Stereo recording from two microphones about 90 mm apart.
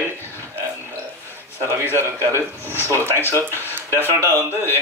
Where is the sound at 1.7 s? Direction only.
30° right (ahead or behind).